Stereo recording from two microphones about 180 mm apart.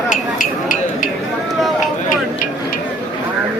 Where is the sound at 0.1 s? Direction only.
45° left (ahead or behind).